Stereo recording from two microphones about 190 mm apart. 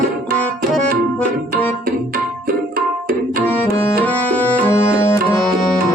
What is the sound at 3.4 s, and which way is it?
Tabla, 10° left (ahead or behind).